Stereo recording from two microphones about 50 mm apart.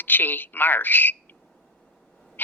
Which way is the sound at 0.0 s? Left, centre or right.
Left.